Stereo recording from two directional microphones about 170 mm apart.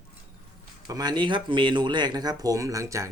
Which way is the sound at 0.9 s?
25° right (ahead or behind).